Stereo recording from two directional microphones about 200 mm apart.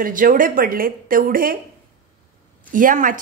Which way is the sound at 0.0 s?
40° right (ahead or behind).